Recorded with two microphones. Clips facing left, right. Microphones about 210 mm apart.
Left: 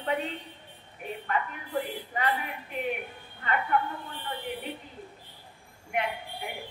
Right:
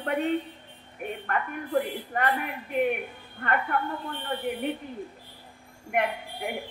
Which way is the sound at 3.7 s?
55° right (ahead or behind).